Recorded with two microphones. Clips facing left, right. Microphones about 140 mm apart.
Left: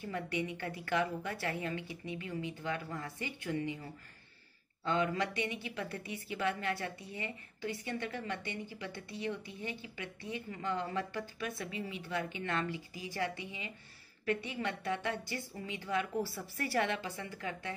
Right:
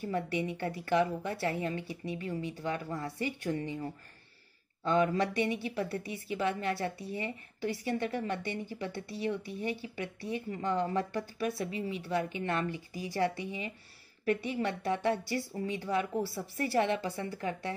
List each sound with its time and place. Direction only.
0.0 s a woman's voice: 30° right (ahead or behind)
4.8 s a woman's voice: 30° right (ahead or behind)
14.5 s a woman's voice: 30° right (ahead or behind)